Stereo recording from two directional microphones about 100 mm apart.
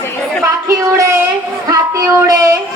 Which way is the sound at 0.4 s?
30° right (ahead or behind).